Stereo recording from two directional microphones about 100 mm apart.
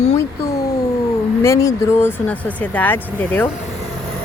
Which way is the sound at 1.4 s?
30° left (ahead or behind).